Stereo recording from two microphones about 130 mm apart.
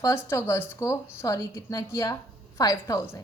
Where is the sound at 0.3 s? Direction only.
20° left (ahead or behind).